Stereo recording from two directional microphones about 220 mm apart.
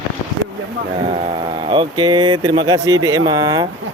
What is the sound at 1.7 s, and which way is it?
Speech, 20° right (ahead or behind).